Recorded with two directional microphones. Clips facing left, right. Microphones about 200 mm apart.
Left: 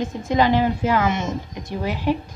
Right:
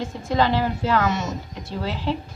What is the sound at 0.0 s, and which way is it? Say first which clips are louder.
A woman's voice: left 2 dB; 20° left (ahead or behind).